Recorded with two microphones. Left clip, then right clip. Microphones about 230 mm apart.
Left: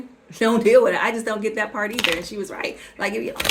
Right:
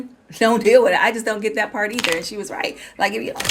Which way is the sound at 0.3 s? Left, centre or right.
Right.